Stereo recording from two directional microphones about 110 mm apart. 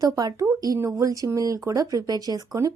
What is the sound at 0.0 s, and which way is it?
A woman's voice, 35° right (ahead or behind).